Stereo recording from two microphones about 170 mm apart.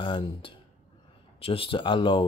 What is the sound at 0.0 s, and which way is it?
Speech, 30° left (ahead or behind).